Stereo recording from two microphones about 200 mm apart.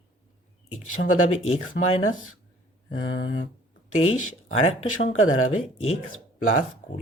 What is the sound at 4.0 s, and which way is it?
Speech, 90° left.